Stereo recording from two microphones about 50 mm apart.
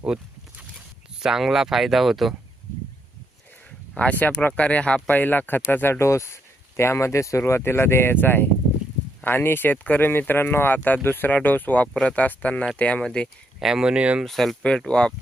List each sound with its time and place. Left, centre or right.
0.1 s speech: centre
3.9 s speech: left
5.0 s speech: left
5.9 s speech: left
9.7 s speech: left
10.1 s speech: left
13.6 s speech: centre
14.3 s speech: centre
14.8 s speech: centre